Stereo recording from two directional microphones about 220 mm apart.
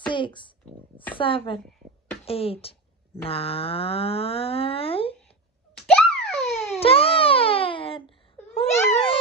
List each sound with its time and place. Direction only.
0.1 s speech: 20° left (ahead or behind)
5.9 s a sound: centre (ahead or behind)
6.7 s baby cry: 25° left (ahead or behind)
8.5 s babbling: 25° left (ahead or behind)